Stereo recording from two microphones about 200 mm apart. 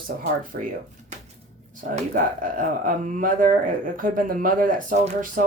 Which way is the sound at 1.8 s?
40° right (ahead or behind).